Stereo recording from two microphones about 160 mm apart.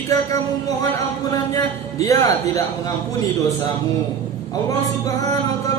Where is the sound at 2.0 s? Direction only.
20° left (ahead or behind).